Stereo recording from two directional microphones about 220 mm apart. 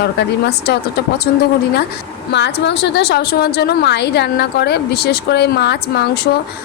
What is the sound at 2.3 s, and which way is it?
A woman's voice, 50° left (ahead or behind).